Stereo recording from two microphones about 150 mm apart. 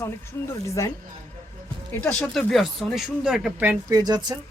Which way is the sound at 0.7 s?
20° left (ahead or behind).